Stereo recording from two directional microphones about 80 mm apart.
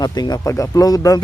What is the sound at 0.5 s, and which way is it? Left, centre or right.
Speech, left.